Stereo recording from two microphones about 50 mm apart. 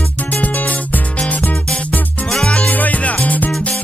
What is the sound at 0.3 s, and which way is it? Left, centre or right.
Music, left.